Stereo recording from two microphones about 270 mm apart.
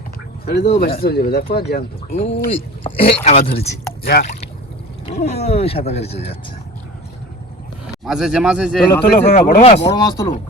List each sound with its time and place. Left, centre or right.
0.6 s speech: left
1.0 s speech: left
2.1 s speech: left
5.3 s speech: left
8.0 s speech: centre
8.9 s speech: centre